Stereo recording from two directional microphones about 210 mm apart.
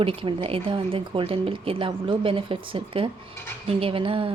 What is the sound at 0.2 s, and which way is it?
A woman's voice, 25° right (ahead or behind).